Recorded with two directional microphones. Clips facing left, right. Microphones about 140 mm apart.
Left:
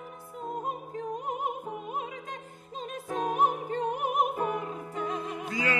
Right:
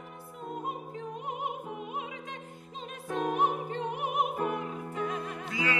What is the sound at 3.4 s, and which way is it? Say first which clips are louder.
Music: left 2 dB; 45° left (ahead or behind).